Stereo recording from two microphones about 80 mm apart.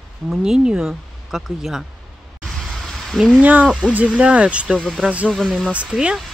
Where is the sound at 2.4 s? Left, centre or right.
Centre.